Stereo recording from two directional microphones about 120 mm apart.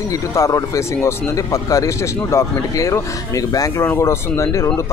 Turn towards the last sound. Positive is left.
turn(degrees=25)  # may be behind; listen again after turning